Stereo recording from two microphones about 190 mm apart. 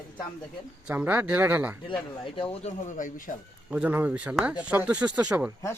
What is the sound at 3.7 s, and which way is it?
Speech, 10° right (ahead or behind).